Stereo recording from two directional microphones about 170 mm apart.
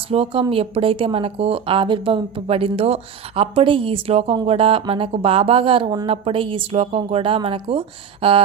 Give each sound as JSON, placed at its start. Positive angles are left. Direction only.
{"t": 0.1, "sound": "speech", "side_deg": -35}